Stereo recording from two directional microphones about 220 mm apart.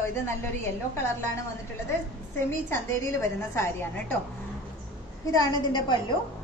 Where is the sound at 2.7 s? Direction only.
10° left (ahead or behind).